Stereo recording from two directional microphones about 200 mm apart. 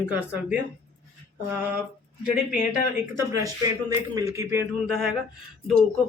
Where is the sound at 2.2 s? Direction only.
10° right (ahead or behind).